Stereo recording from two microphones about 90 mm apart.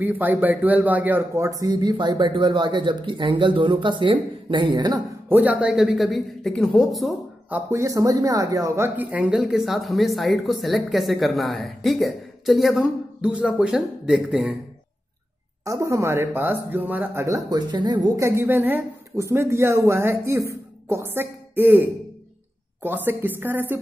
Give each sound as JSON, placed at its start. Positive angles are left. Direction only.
{"t": 0.0, "sound": "speech", "side_deg": -20}
{"t": 1.3, "sound": "speech", "side_deg": -35}
{"t": 5.3, "sound": "speech", "side_deg": -15}
{"t": 5.8, "sound": "speech", "side_deg": 0}
{"t": 7.7, "sound": "speech", "side_deg": -40}
{"t": 8.9, "sound": "speech", "side_deg": -20}
{"t": 15.6, "sound": "speech", "side_deg": -35}
{"t": 17.2, "sound": "speech", "side_deg": -30}
{"t": 17.5, "sound": "speech", "side_deg": -50}
{"t": 18.0, "sound": "speech", "side_deg": -35}